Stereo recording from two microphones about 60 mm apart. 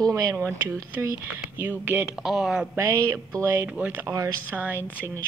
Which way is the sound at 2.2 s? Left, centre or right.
Centre.